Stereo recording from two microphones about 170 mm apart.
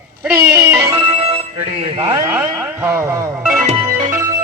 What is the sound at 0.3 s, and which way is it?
Music, 15° right (ahead or behind).